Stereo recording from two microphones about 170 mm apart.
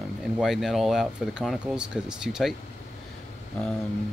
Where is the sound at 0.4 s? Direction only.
Centre (ahead or behind).